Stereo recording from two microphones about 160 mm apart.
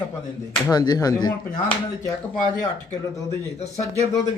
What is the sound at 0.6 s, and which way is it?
Speech, 25° left (ahead or behind).